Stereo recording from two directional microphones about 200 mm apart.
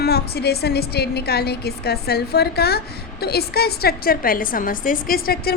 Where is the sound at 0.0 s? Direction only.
55° left (ahead or behind).